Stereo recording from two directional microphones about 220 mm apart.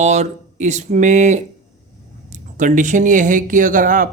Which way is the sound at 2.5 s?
35° right (ahead or behind).